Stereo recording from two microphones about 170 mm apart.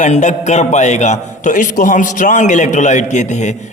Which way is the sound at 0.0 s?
45° left (ahead or behind).